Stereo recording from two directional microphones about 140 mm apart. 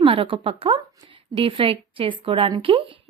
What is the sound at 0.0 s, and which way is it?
A woman's voice, 40° right (ahead or behind).